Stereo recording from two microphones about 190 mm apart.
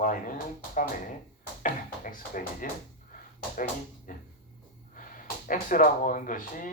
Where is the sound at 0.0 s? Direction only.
45° left (ahead or behind).